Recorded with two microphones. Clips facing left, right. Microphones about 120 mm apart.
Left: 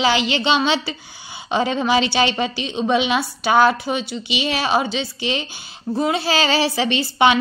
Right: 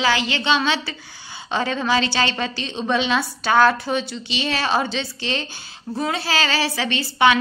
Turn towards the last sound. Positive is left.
turn(degrees=20)  # may be behind; listen again after turning